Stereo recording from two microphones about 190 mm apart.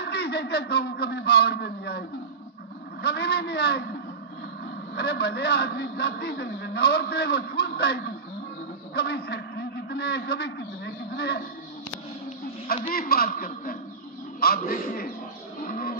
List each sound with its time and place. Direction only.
0.0 s a man's voice: 60° left (ahead or behind)
12.9 s a man's voice: 50° left (ahead or behind)
15.6 s music: 50° left (ahead or behind)